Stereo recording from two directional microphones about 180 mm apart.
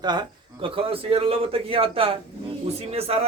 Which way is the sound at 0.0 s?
25° right (ahead or behind).